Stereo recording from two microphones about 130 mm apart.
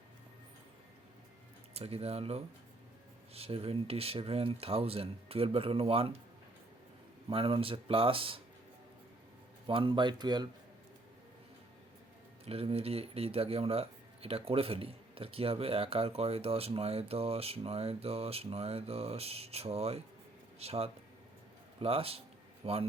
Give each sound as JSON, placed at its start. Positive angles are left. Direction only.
{"t": 1.7, "sound": "speech", "side_deg": -50}
{"t": 7.3, "sound": "speech", "side_deg": -45}
{"t": 9.6, "sound": "speech", "side_deg": -40}
{"t": 12.5, "sound": "a man's voice", "side_deg": -50}